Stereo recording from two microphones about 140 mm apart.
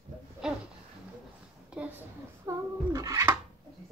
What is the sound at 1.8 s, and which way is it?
A child's voice, 15° right (ahead or behind).